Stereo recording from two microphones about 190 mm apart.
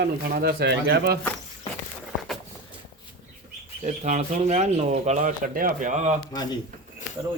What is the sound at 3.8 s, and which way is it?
Speech, 40° right (ahead or behind).